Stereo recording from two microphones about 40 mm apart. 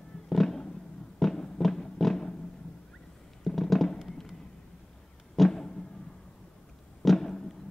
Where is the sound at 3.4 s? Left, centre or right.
Centre.